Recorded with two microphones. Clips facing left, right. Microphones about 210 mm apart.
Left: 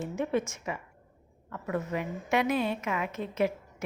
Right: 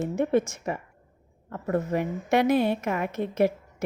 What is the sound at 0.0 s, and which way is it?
A woman's voice, 50° right (ahead or behind).